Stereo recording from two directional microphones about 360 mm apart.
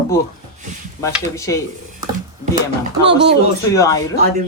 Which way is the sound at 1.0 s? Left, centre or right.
Centre.